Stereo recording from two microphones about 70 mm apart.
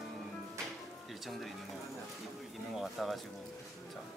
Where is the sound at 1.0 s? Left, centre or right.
Centre.